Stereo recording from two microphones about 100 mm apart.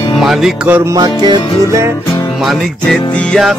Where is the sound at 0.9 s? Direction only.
45° right (ahead or behind).